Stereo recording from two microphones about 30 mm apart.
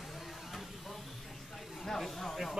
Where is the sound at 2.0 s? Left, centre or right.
Centre.